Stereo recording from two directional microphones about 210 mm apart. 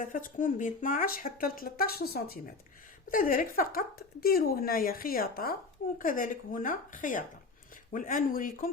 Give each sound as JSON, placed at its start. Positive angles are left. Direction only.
{"t": 0.0, "sound": "a woman's voice", "side_deg": 40}